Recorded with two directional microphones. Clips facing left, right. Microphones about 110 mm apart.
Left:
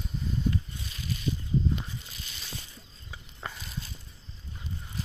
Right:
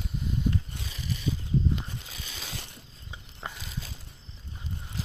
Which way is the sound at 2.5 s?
70° right (ahead or behind).